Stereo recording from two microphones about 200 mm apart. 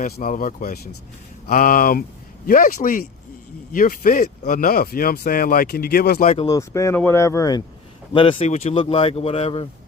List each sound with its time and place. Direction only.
0.0 s speech: 45° left (ahead or behind)
6.4 s speech: 15° left (ahead or behind)